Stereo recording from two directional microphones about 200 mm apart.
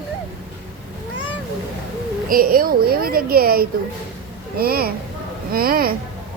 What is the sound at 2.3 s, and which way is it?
Speech, 45° right (ahead or behind).